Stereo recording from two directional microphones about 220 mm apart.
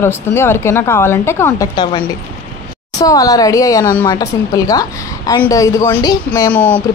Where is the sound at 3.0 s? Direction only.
15° left (ahead or behind).